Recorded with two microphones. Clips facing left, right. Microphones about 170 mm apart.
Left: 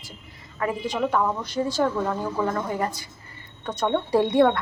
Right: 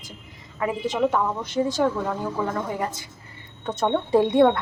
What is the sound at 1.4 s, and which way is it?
A woman's voice, 20° right (ahead or behind).